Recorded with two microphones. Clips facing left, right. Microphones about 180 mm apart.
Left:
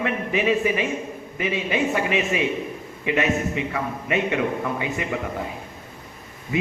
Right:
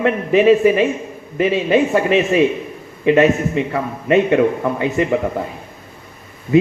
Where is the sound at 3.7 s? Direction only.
40° right (ahead or behind).